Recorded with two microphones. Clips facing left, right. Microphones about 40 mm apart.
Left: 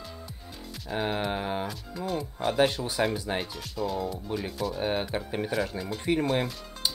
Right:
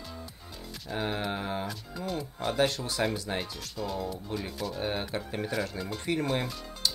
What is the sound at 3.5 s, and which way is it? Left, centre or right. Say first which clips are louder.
Speech: left 4 dB; centre.